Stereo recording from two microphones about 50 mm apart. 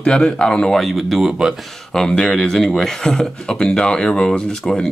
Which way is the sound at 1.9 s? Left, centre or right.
Centre.